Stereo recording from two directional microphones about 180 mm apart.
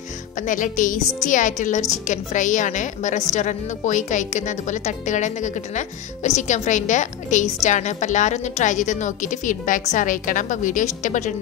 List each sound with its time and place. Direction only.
0.4 s a woman's voice: 45° left (ahead or behind)